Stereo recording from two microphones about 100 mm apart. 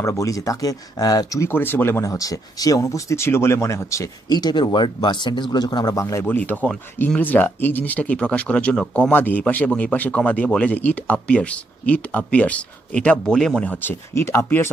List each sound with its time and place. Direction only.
0.0 s speech: 30° left (ahead or behind)
1.5 s speech: 20° left (ahead or behind)
2.0 s speech: 35° left (ahead or behind)
4.3 s speech: 45° left (ahead or behind)
6.2 s a man's voice: 20° left (ahead or behind)
13.7 s speech: 25° left (ahead or behind)